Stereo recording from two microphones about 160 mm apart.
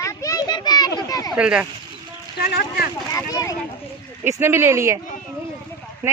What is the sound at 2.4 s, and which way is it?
Speech, 70° left (ahead or behind).